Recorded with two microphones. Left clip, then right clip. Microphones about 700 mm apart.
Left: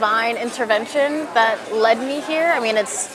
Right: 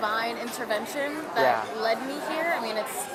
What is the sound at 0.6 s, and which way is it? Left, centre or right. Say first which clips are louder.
Speech: left 11 dB; left.